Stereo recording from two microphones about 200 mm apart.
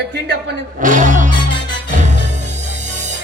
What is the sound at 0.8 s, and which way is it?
Music, 40° right (ahead or behind).